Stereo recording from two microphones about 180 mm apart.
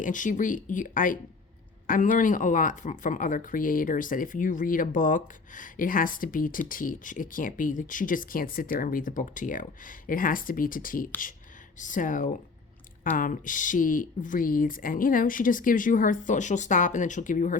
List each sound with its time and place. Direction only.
0.0 s speech: 45° left (ahead or behind)